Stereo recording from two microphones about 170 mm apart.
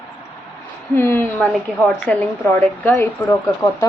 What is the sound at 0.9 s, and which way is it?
A woman's voice, 15° left (ahead or behind).